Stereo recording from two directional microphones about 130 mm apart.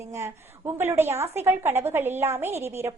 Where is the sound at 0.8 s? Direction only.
15° right (ahead or behind).